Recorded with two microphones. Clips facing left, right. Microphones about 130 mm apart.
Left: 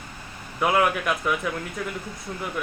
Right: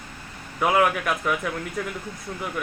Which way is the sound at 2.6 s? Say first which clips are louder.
Even; centre (ahead or behind).